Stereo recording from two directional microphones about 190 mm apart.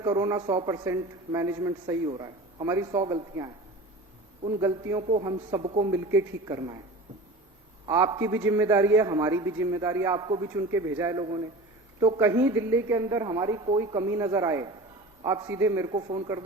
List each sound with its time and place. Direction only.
0.0 s a man's voice: 20° right (ahead or behind)
4.6 s a man's voice: 15° right (ahead or behind)
5.9 s a man's voice: 15° right (ahead or behind)
7.9 s a man's voice: 20° right (ahead or behind)